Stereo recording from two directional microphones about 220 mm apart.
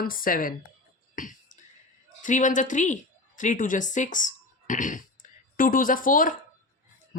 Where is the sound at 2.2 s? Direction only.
35° left (ahead or behind).